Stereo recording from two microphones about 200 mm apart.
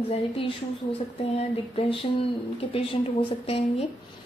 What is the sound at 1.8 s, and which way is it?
Speech, 25° left (ahead or behind).